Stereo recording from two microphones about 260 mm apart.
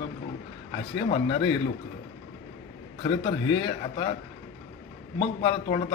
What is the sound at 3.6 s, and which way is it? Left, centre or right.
Speech, centre.